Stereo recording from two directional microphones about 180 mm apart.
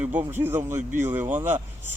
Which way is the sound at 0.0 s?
10° right (ahead or behind).